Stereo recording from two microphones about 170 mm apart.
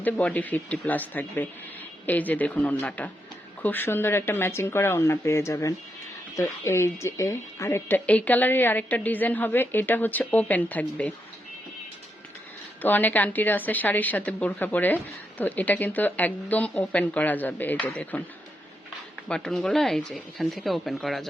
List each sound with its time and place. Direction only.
0.0 s a woman's voice: 10° left (ahead or behind)
12.8 s a woman's voice: 10° left (ahead or behind)
19.3 s speech: 5° left (ahead or behind)